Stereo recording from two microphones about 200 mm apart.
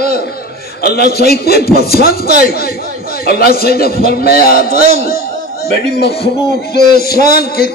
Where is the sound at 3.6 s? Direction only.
50° left (ahead or behind).